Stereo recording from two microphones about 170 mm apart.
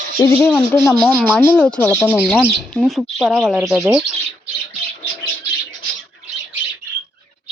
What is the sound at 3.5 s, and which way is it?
Speech, 20° right (ahead or behind).